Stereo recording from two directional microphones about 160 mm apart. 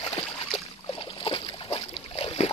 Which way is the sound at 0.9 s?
35° left (ahead or behind).